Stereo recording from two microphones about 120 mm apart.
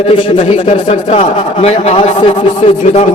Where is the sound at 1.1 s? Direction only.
60° left (ahead or behind).